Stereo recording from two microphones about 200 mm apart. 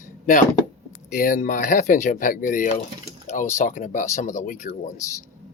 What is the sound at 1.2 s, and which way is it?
Speech, 40° left (ahead or behind).